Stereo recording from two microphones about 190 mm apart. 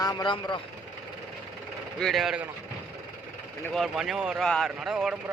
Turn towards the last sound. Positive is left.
turn(degrees=-5)  # may be behind; listen again after turning